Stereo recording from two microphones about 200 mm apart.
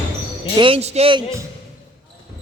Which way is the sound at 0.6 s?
30° right (ahead or behind).